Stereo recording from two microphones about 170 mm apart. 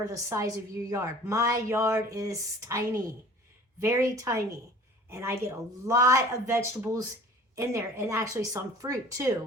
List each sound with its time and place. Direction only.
0.1 s a woman's voice: 20° right (ahead or behind)